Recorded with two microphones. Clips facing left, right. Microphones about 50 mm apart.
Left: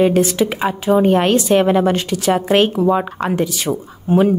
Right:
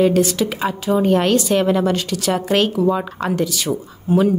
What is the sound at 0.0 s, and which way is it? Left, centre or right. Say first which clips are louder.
A woman's voice: left 2 dB; left.